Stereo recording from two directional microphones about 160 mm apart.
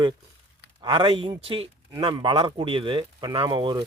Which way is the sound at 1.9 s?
25° right (ahead or behind).